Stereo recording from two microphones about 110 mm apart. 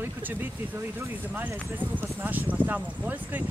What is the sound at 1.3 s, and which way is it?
Speech, 20° right (ahead or behind).